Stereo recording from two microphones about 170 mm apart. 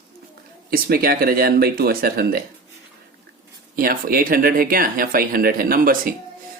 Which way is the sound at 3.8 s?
60° right (ahead or behind).